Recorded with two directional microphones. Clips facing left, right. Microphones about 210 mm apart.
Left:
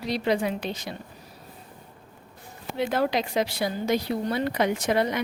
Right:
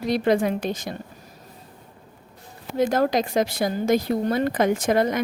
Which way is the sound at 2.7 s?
45° right (ahead or behind).